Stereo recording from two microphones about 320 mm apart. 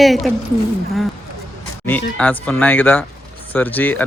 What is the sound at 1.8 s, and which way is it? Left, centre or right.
Speech, centre.